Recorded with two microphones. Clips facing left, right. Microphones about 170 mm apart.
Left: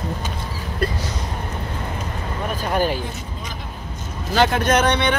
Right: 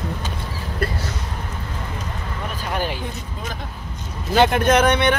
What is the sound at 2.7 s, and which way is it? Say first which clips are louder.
Speech: left 5 dB; 40° left (ahead or behind).